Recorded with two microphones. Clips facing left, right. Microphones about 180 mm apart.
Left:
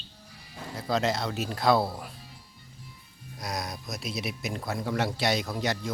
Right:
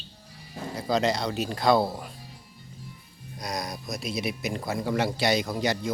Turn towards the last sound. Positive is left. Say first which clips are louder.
# right 3 dB
turn(degrees=0)  # may be behind; listen again after turning